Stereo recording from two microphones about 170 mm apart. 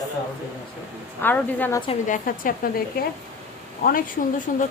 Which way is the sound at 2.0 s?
50° left (ahead or behind).